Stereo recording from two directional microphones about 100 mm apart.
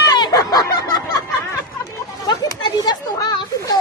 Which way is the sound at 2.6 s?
45° left (ahead or behind).